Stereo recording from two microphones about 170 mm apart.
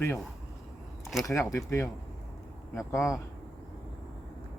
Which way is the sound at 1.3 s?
15° left (ahead or behind).